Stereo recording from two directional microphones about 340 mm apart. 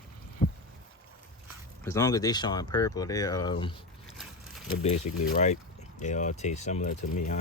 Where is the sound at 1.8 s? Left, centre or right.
Centre.